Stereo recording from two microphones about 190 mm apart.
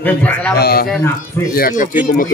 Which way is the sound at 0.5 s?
55° left (ahead or behind).